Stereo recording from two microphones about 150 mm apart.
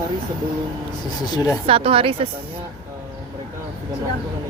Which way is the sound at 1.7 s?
40° right (ahead or behind).